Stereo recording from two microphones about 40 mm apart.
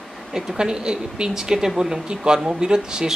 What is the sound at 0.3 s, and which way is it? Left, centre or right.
Speech, centre.